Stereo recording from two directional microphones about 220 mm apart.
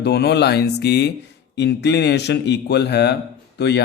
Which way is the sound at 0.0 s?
50° left (ahead or behind).